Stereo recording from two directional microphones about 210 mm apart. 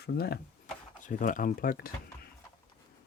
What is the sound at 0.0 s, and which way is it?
Speech, 50° left (ahead or behind).